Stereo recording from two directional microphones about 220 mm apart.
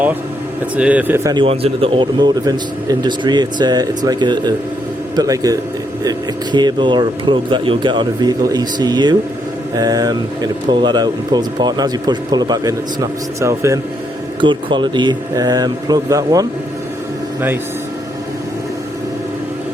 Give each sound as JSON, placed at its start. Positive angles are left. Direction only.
{"t": 0.8, "sound": "a man's voice", "side_deg": -5}